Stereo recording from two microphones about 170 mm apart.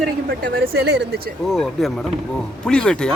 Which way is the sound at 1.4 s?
Centre (ahead or behind).